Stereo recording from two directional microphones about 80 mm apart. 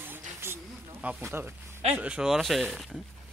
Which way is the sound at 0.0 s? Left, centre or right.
Right.